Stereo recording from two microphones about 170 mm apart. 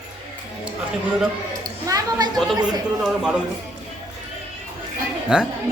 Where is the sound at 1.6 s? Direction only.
20° right (ahead or behind).